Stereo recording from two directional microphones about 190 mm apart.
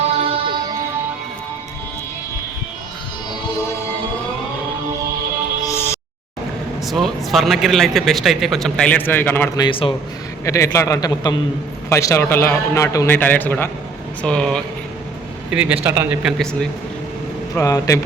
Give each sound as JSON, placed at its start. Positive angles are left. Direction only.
{"t": 0.2, "sound": "music", "side_deg": -30}
{"t": 5.6, "sound": "music", "side_deg": 15}
{"t": 6.8, "sound": "speech", "side_deg": 0}
{"t": 9.6, "sound": "a man's voice", "side_deg": 25}
{"t": 10.4, "sound": "a man's voice", "side_deg": 15}
{"t": 15.4, "sound": "a man's voice", "side_deg": -5}
{"t": 16.4, "sound": "speech", "side_deg": 5}
{"t": 17.5, "sound": "a man's voice", "side_deg": 15}